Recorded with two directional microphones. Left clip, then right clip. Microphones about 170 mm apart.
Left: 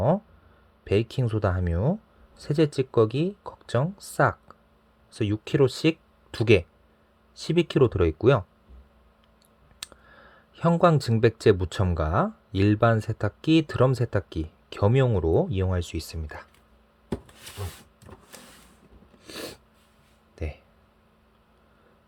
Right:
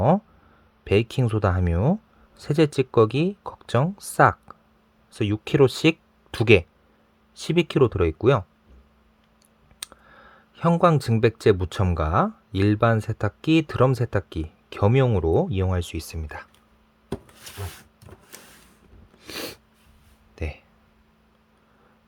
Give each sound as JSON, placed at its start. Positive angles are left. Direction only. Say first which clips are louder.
{"t": 0.9, "sound": "speech", "louder": "right 3 dB", "side_deg": -15}
{"t": 9.8, "sound": "speech", "louder": "right 2 dB", "side_deg": -5}
{"t": 18.1, "sound": "power windows", "louder": "left 1 dB", "side_deg": -20}
{"t": 19.2, "sound": "sneeze", "louder": "right 4 dB", "side_deg": -15}
{"t": 20.3, "sound": "a sound", "louder": "right 3 dB", "side_deg": -10}